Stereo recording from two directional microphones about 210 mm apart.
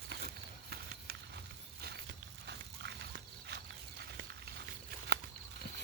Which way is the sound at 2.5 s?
55° right (ahead or behind).